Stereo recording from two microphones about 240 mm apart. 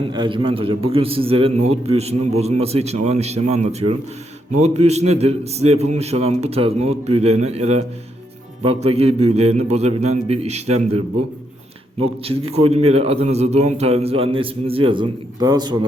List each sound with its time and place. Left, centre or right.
0.0 s a man's voice: centre
12.2 s a man's voice: right